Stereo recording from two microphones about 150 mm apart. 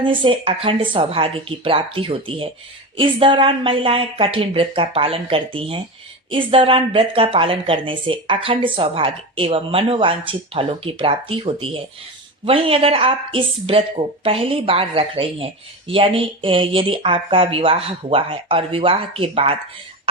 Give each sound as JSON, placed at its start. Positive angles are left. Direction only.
{"t": 0.0, "sound": "speech", "side_deg": -35}